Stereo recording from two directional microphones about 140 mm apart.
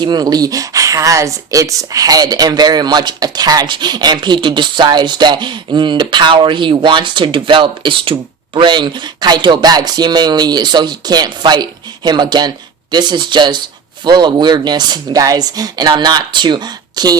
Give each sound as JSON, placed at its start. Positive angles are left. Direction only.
{"t": 0.0, "sound": "speech", "side_deg": -30}